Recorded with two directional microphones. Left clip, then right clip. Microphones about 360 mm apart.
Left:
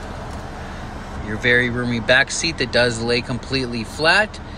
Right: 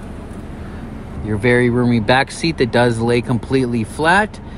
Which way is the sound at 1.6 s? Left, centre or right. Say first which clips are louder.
Right 5 dB; centre.